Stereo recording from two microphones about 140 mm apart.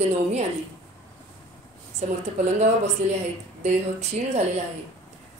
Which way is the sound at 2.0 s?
55° right (ahead or behind).